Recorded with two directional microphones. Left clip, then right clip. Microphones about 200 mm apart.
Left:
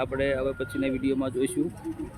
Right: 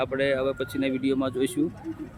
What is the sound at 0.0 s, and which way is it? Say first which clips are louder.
Speech: right 2 dB; 10° right (ahead or behind).